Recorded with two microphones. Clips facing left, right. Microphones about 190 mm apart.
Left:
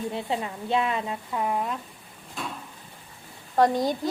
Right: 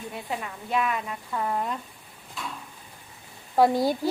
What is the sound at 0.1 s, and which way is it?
Speech, 25° left (ahead or behind).